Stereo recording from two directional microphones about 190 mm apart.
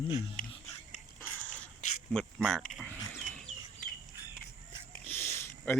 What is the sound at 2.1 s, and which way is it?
Speech, centre (ahead or behind).